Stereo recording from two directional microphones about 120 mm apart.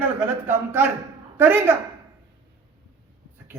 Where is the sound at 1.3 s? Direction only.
15° right (ahead or behind).